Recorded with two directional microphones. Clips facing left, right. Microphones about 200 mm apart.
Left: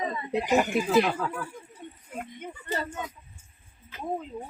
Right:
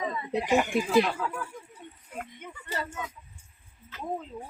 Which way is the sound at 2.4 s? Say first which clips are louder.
Left 4 dB; 30° left (ahead or behind).